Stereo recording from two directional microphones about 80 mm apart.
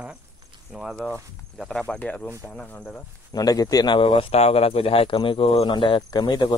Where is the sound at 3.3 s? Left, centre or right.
Left.